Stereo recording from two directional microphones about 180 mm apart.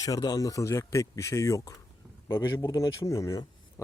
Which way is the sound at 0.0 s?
20° left (ahead or behind).